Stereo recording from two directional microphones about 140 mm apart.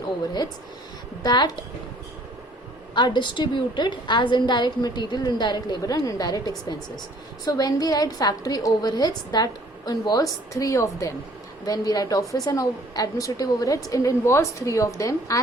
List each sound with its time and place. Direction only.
1.2 s a woman's voice: 30° left (ahead or behind)
2.9 s a woman's voice: 35° left (ahead or behind)